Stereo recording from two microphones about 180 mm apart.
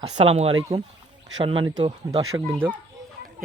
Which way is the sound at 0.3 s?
35° right (ahead or behind).